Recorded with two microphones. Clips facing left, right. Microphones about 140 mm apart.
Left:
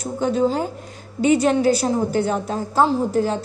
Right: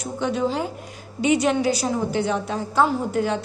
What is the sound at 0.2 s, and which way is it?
A woman's voice, 40° left (ahead or behind).